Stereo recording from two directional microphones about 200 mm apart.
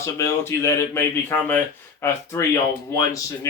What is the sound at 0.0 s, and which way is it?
Speech, 15° left (ahead or behind).